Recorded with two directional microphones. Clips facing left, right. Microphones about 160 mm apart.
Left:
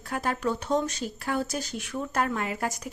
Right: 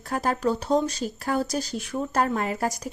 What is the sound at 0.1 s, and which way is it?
Speech, 35° right (ahead or behind).